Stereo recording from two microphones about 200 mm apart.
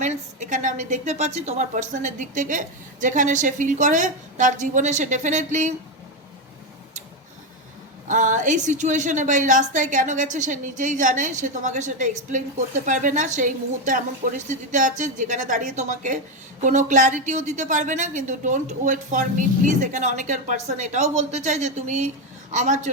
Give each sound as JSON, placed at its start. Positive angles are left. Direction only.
{"t": 0.0, "sound": "a woman's voice", "side_deg": -35}
{"t": 8.0, "sound": "a woman's voice", "side_deg": -40}